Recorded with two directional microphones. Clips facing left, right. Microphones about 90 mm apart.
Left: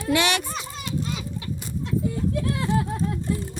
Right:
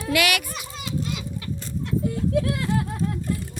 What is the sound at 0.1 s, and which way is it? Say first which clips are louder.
Speech: left 1 dB; 30° left (ahead or behind).